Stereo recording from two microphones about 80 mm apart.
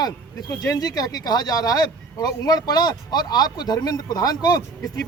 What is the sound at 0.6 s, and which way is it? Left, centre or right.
Speech, left.